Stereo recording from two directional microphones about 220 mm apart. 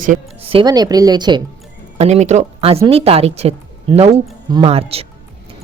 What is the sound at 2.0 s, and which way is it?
Speech, 30° right (ahead or behind).